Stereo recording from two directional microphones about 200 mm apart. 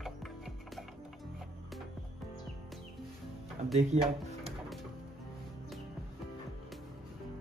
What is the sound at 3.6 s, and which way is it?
Speech, 35° right (ahead or behind).